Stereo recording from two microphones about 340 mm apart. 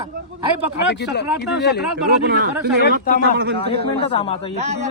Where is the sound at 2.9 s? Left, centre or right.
Right.